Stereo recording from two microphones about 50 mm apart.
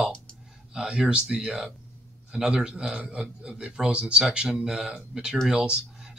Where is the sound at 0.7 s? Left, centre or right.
Centre.